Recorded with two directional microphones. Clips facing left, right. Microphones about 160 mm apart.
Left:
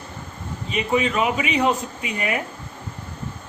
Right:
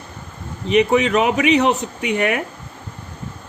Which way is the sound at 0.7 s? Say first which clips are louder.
Right 7 dB; 90° right.